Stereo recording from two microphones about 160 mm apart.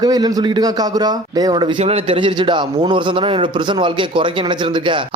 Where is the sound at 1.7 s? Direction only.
40° right (ahead or behind).